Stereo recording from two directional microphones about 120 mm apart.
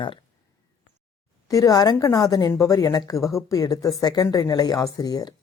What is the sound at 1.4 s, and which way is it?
A woman's voice, 30° left (ahead or behind).